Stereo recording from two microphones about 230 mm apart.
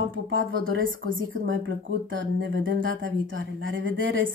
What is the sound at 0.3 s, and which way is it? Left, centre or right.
Speech, right.